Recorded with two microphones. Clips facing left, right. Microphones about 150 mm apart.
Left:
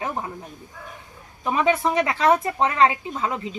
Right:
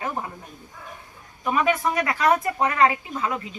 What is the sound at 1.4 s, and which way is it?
A woman's voice, 25° left (ahead or behind).